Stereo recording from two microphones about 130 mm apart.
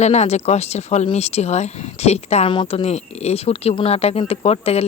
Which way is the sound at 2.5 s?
40° left (ahead or behind).